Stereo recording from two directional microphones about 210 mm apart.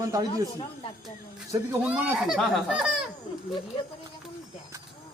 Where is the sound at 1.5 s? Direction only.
10° right (ahead or behind).